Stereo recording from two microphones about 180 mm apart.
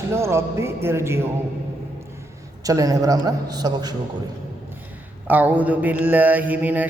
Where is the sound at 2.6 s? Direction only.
20° right (ahead or behind).